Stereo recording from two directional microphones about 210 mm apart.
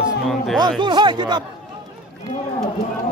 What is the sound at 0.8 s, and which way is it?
Speech, 20° right (ahead or behind).